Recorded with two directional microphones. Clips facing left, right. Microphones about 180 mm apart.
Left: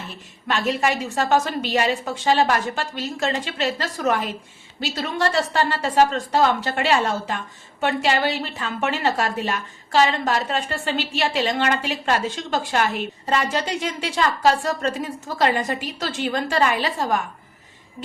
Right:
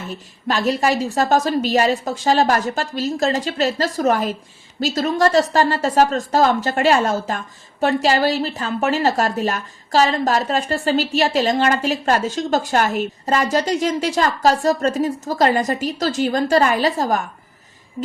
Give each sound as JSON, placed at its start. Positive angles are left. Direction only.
{"t": 0.4, "sound": "a woman's voice", "side_deg": -35}